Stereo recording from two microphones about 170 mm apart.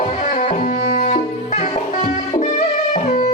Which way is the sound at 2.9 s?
45° left (ahead or behind).